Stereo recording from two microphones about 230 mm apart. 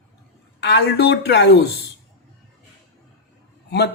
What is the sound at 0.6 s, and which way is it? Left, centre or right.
Speech, left.